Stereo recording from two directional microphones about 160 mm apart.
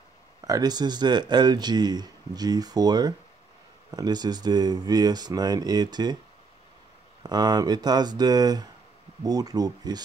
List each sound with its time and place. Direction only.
0.5 s speech: 25° right (ahead or behind)
7.2 s speech: 25° right (ahead or behind)